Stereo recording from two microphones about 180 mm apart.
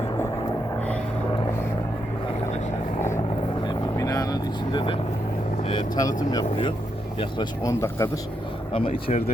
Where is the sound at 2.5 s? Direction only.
40° left (ahead or behind).